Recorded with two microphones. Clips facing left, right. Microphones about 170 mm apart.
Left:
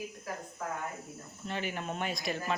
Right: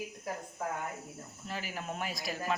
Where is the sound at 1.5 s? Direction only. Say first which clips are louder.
Left 3 dB; 5° right (ahead or behind).